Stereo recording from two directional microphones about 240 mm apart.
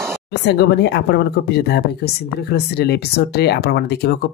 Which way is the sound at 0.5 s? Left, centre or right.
Left.